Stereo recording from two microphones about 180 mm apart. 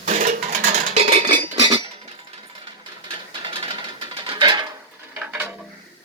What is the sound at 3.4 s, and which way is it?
Music, 30° right (ahead or behind).